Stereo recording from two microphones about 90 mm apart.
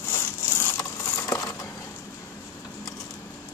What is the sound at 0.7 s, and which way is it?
Coin, 40° left (ahead or behind).